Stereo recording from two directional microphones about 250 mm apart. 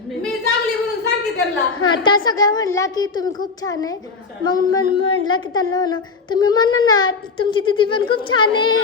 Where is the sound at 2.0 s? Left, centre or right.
Centre.